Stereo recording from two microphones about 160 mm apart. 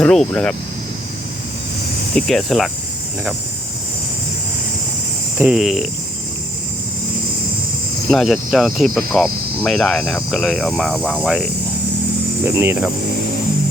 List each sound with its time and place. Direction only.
0.0 s cricket: 5° left (ahead or behind)
2.1 s cricket: centre (ahead or behind)
5.4 s cricket: 5° right (ahead or behind)
8.1 s cricket: centre (ahead or behind)
12.5 s speech: 15° right (ahead or behind)